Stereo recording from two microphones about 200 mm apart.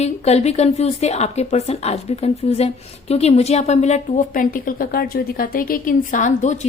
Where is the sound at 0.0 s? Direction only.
35° left (ahead or behind).